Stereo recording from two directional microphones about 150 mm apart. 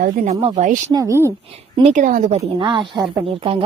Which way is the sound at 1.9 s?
60° right (ahead or behind).